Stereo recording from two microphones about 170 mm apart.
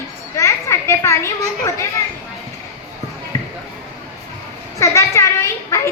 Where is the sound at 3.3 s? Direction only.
20° left (ahead or behind).